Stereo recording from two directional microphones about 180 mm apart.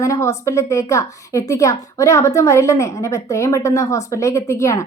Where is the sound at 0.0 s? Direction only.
15° left (ahead or behind).